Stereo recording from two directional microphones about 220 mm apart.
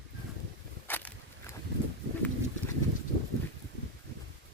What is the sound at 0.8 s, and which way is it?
Walk, 10° left (ahead or behind).